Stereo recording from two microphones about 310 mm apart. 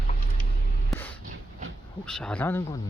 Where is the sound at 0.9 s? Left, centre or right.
Centre.